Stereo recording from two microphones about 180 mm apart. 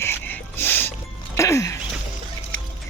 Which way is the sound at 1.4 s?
15° left (ahead or behind).